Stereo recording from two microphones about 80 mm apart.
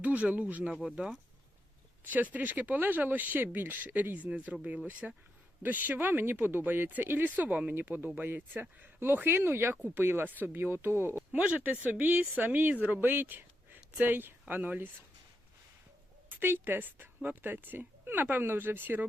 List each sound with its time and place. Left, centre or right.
0.0 s speech: centre
11.3 s speech: centre
16.4 s speech: right